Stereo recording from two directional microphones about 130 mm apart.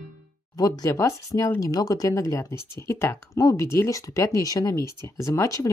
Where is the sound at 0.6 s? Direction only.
25° left (ahead or behind).